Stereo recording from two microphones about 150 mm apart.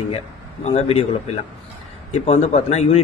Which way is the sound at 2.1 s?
45° left (ahead or behind).